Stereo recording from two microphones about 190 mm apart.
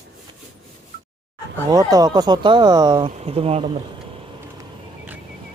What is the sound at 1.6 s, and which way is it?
Speech, 20° right (ahead or behind).